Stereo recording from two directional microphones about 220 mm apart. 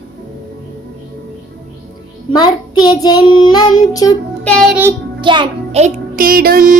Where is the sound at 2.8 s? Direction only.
20° left (ahead or behind).